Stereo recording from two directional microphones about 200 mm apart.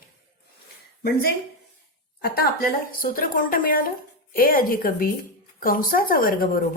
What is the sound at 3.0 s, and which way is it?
A woman's voice, 45° left (ahead or behind).